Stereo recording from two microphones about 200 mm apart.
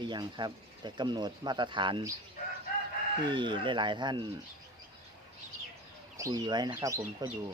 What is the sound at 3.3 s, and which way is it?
Speech, 25° right (ahead or behind).